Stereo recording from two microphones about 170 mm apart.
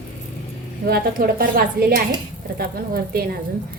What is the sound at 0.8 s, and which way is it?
A woman's voice, 65° right (ahead or behind).